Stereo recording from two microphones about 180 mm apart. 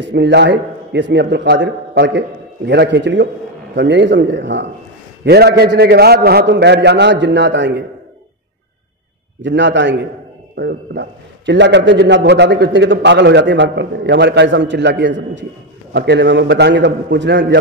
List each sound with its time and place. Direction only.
0.0 s a man's voice: 75° right (ahead or behind)
5.2 s a man's voice: 65° right (ahead or behind)
9.4 s a man's voice: 80° right